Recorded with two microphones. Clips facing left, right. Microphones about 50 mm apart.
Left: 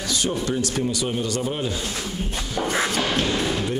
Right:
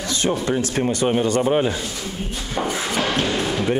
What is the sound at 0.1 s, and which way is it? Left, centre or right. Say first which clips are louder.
Speech: right 3 dB; right.